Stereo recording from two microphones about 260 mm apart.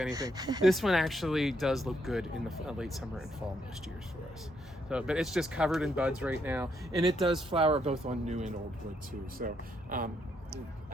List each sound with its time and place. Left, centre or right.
0.1 s speech: centre
0.6 s speech: centre
4.9 s speech: centre
7.5 s speech: right